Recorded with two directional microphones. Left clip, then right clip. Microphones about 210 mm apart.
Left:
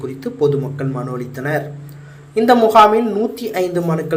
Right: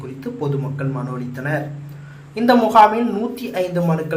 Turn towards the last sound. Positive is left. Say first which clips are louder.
# left 2 dB
turn(degrees=15)  # may be behind; listen again after turning